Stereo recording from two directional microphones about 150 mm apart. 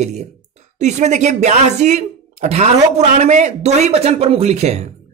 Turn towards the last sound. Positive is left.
turn(degrees=-45)  # may be behind; listen again after turning